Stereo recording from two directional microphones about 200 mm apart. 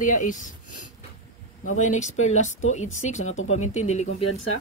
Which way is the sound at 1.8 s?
35° left (ahead or behind).